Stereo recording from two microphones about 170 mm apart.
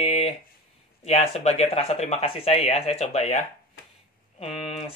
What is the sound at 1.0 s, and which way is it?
Speech, 35° left (ahead or behind).